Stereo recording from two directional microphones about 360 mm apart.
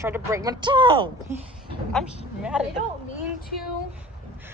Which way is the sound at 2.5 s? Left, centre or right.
Centre.